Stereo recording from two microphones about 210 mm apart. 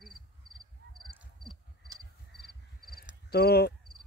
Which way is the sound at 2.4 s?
45° left (ahead or behind).